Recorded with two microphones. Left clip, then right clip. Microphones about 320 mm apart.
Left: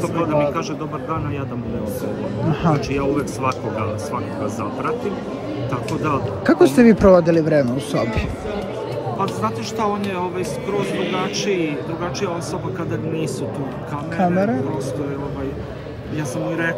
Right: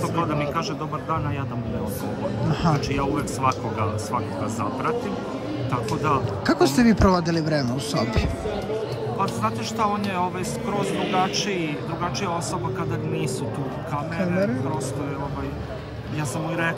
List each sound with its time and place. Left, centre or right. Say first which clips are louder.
2.6 s speech: left 4 dB; centre
6.0 s speech: left 4 dB; centre
9.4 s speech: left 2 dB; centre
11.3 s speech: left 5 dB; centre